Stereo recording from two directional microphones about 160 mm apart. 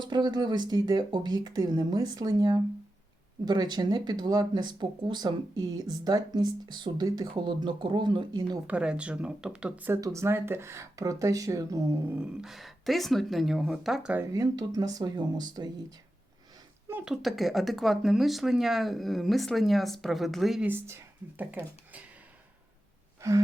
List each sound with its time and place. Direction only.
0.0 s speech: 25° right (ahead or behind)
8.6 s speech: 5° right (ahead or behind)
12.1 s speech: 5° right (ahead or behind)
14.3 s speech: 25° right (ahead or behind)
16.9 s speech: centre (ahead or behind)
20.7 s speech: 15° right (ahead or behind)